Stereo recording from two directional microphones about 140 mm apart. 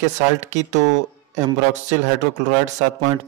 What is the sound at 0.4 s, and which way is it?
Speech, 55° right (ahead or behind).